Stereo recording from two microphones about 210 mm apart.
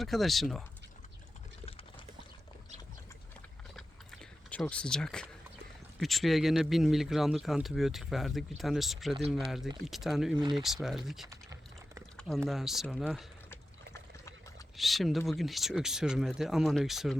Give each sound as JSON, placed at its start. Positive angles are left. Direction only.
{"t": 0.0, "sound": "speech", "side_deg": 0}
{"t": 3.8, "sound": "a sound", "side_deg": 0}
{"t": 6.0, "sound": "speech", "side_deg": 0}
{"t": 12.5, "sound": "speech", "side_deg": 0}
{"t": 13.5, "sound": "water", "side_deg": 15}
{"t": 14.8, "sound": "speech", "side_deg": 0}